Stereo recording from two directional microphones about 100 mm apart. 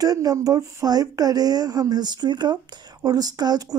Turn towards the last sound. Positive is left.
turn(degrees=-40)  # may be behind; listen again after turning